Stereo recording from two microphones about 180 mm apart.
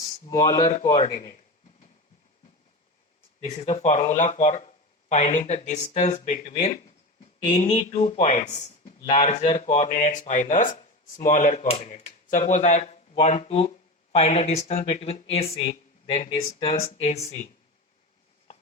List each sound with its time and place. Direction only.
0.3 s speech: 20° left (ahead or behind)
1.1 s speech: 40° left (ahead or behind)
3.4 s speech: 35° left (ahead or behind)